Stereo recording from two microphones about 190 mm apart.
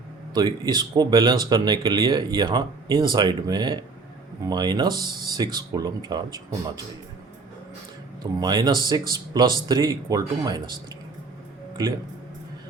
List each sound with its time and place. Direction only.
0.3 s speech: 20° right (ahead or behind)
8.2 s speech: 20° right (ahead or behind)